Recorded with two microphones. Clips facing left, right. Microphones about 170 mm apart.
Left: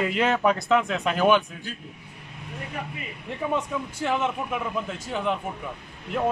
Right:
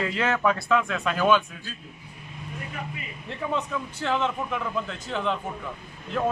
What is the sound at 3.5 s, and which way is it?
A man's voice, 10° left (ahead or behind).